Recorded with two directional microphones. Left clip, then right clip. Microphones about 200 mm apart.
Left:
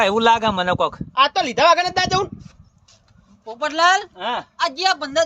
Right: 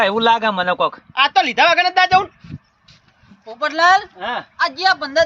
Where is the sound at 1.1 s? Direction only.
65° left (ahead or behind).